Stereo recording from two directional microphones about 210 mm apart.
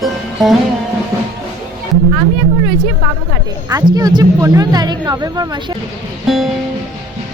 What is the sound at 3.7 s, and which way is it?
Speech, 15° right (ahead or behind).